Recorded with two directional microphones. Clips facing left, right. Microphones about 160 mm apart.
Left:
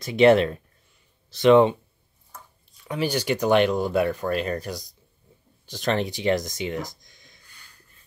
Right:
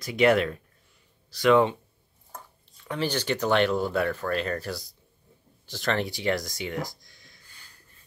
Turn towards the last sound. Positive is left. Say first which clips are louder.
# left 1 dB
turn(degrees=20)  # may be behind; listen again after turning